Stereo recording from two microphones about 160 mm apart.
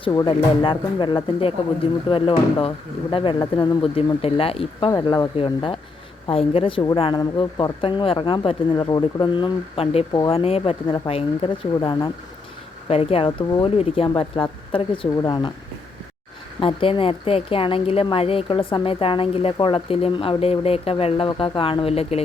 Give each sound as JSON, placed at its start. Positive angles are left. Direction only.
{"t": 0.0, "sound": "a woman's voice", "side_deg": 25}
{"t": 4.9, "sound": "a woman's voice", "side_deg": 25}
{"t": 12.9, "sound": "a woman's voice", "side_deg": 40}
{"t": 16.6, "sound": "a woman's voice", "side_deg": 35}